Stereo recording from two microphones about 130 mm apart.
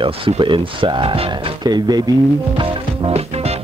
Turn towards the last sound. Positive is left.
turn(degrees=-50)  # may be behind; listen again after turning